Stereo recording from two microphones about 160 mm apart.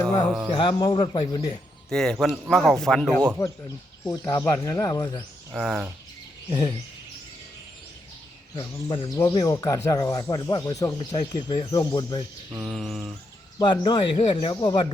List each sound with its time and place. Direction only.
0.5 s speech: 30° left (ahead or behind)
1.9 s a man's voice: 5° left (ahead or behind)
4.0 s speech: 20° left (ahead or behind)
5.5 s a man's voice: centre (ahead or behind)
6.5 s speech: 30° left (ahead or behind)
8.5 s speech: 30° left (ahead or behind)
12.5 s mantra: 15° right (ahead or behind)
12.7 s a man's voice: centre (ahead or behind)
13.6 s speech: 30° left (ahead or behind)